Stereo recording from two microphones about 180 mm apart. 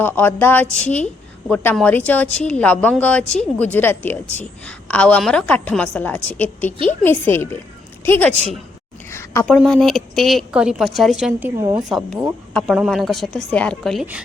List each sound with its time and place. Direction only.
0.0 s a woman's voice: 10° left (ahead or behind)
9.0 s a sound: 15° left (ahead or behind)
9.6 s a woman's voice: centre (ahead or behind); by 11.9 s 20° right (ahead or behind)
11.9 s a woman's voice: centre (ahead or behind)